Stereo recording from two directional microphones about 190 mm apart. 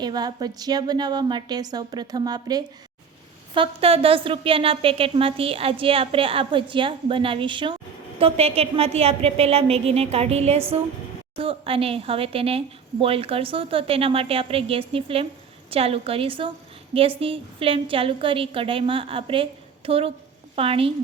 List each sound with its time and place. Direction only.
0.0 s a woman's voice: 20° right (ahead or behind)